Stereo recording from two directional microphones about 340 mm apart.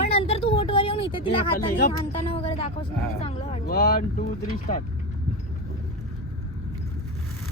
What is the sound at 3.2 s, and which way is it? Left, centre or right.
Speech, centre.